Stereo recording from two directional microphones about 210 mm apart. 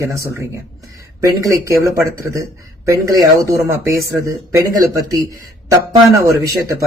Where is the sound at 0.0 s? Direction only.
10° right (ahead or behind).